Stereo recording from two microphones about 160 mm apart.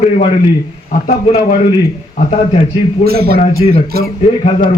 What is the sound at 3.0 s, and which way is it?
A man's voice, 75° right (ahead or behind).